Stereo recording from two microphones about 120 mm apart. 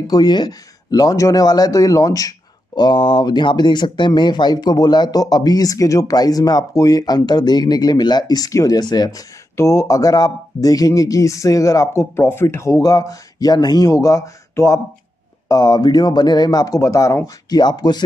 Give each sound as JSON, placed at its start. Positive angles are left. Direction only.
{"t": 0.0, "sound": "speech", "side_deg": 35}
{"t": 9.6, "sound": "speech", "side_deg": 25}